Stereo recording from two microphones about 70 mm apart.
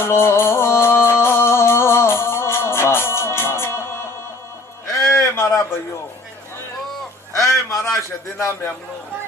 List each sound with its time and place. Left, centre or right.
0.0 s music: left
4.9 s a sound: left
7.4 s a man's voice: left